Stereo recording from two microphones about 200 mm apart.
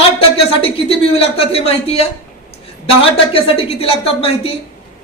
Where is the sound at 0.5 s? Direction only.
30° left (ahead or behind).